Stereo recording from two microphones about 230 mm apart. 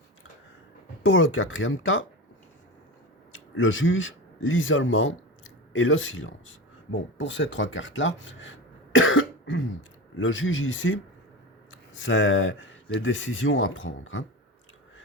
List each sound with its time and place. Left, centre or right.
1.0 s speech: left
3.3 s speech: left